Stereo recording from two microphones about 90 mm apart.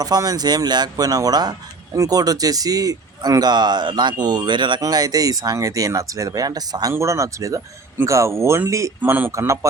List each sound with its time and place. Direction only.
0.0 s speech: 45° right (ahead or behind)
4.8 s speech: 45° right (ahead or behind)
6.9 s speech: 35° right (ahead or behind)
9.0 s speech: 20° right (ahead or behind)